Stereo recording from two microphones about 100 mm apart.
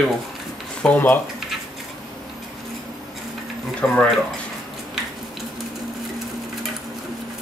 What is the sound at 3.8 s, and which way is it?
Speech, 15° left (ahead or behind).